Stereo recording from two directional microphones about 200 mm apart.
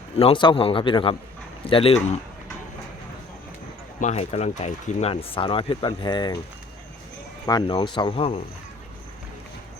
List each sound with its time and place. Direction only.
0.2 s speech: 25° left (ahead or behind)
4.0 s speech: 35° left (ahead or behind)
7.4 s speech: 20° left (ahead or behind)